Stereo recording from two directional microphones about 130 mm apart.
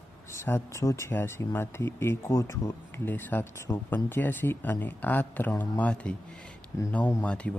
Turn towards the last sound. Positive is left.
turn(degrees=10)  # may be behind; listen again after turning